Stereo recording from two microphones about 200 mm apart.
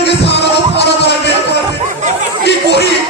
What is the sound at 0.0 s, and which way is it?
Music, 60° left (ahead or behind).